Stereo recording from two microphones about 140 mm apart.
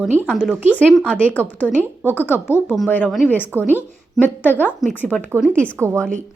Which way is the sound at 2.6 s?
Centre (ahead or behind).